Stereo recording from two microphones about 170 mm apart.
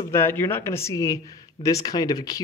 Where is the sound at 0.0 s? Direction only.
15° left (ahead or behind).